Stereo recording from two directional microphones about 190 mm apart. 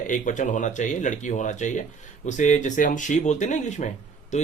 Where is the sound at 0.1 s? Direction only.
40° left (ahead or behind).